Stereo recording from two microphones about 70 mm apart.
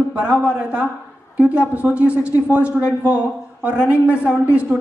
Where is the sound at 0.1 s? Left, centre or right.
Centre.